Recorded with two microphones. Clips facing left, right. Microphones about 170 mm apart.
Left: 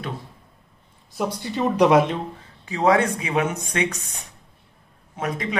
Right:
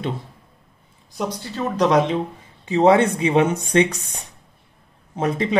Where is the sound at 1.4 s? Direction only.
15° left (ahead or behind).